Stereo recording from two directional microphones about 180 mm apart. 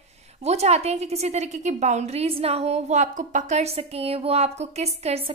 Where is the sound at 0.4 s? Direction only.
35° right (ahead or behind).